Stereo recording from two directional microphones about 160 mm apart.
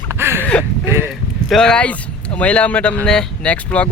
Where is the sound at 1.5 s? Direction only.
5° left (ahead or behind).